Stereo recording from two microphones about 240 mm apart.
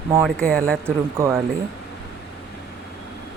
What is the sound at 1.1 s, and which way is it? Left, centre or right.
Speech, centre.